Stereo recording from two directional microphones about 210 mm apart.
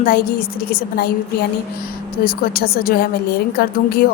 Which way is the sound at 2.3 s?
45° left (ahead or behind).